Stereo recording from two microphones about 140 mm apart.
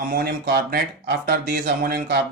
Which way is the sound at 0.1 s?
90° right.